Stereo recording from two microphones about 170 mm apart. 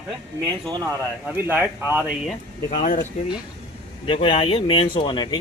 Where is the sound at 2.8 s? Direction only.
50° left (ahead or behind).